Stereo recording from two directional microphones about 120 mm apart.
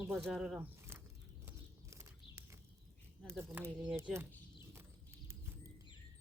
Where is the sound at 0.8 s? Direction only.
20° right (ahead or behind).